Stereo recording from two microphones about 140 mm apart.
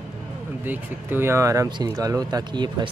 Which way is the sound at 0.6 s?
15° right (ahead or behind).